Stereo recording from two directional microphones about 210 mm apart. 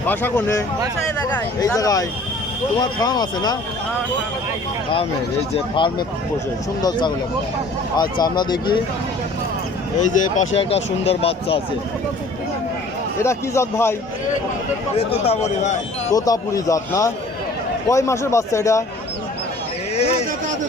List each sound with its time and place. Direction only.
0.1 s a man's voice: 10° left (ahead or behind)
5.5 s speech: 25° left (ahead or behind)
10.0 s speech: 35° left (ahead or behind)
13.2 s a man's voice: 15° left (ahead or behind)
15.1 s speech: 30° left (ahead or behind)
16.1 s a man's voice: 15° left (ahead or behind)